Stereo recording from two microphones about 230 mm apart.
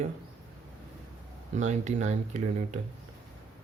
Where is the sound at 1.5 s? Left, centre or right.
Right.